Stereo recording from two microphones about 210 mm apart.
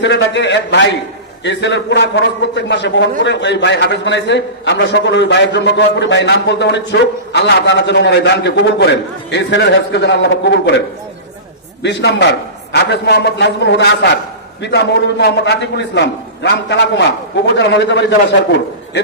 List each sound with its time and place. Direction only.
0.0 s a man's voice: 60° left (ahead or behind)
11.8 s a man's voice: 55° left (ahead or behind)